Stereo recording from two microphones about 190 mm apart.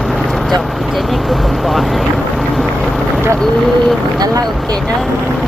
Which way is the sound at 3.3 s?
Centre (ahead or behind).